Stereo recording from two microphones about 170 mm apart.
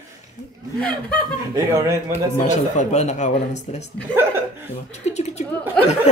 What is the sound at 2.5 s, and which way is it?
Speech, 45° left (ahead or behind).